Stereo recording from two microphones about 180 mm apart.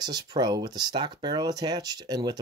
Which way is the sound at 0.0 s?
25° right (ahead or behind).